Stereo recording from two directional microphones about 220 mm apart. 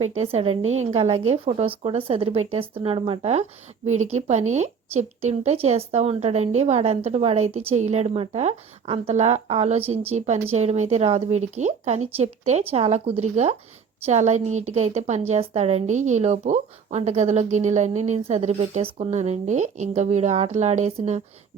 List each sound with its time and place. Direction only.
0.2 s a woman's voice: 25° right (ahead or behind)